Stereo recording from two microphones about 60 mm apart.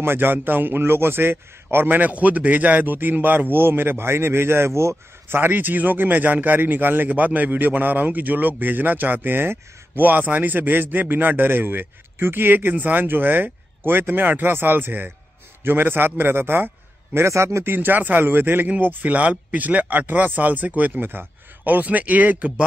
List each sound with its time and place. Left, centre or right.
0.0 s speech: right
5.4 s speech: right
17.7 s speech: right